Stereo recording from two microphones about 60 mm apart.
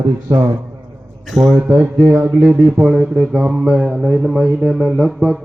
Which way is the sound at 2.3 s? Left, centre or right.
Centre.